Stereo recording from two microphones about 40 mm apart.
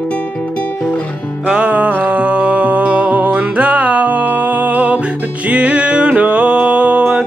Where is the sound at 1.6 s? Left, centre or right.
Right.